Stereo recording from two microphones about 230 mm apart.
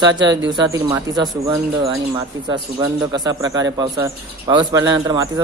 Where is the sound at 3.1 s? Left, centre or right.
Centre.